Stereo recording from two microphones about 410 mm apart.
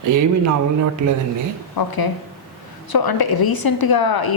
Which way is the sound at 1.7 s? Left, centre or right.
Left.